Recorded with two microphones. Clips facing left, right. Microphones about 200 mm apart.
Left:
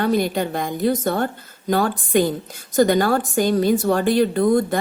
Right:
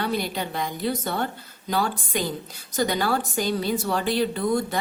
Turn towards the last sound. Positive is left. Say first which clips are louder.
# left 7 dB
turn(degrees=50)  # may be behind; listen again after turning